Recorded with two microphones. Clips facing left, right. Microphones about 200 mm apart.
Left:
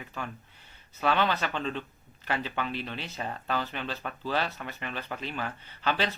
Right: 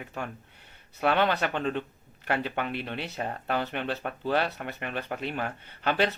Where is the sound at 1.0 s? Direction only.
55° right (ahead or behind).